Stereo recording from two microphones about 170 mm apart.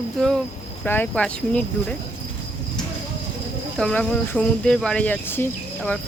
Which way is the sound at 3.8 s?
5° left (ahead or behind).